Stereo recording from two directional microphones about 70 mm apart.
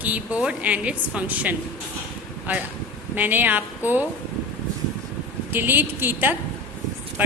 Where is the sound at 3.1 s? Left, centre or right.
Right.